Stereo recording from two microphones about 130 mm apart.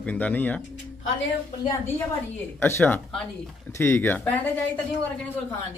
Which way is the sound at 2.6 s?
15° left (ahead or behind).